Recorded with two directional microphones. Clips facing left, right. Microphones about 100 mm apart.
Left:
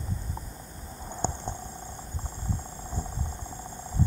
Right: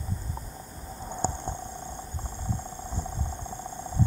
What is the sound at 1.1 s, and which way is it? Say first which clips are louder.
Stomach rumble: right 1 dB; 15° right (ahead or behind).